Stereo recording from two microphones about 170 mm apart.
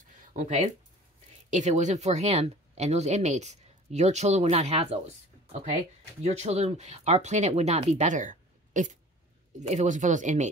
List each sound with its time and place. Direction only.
0.3 s speech: 45° right (ahead or behind)